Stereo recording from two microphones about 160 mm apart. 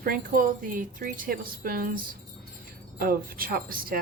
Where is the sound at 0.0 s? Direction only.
60° right (ahead or behind).